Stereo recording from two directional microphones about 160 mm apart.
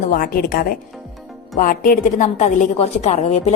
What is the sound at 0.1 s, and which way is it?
A woman's voice, 65° left (ahead or behind).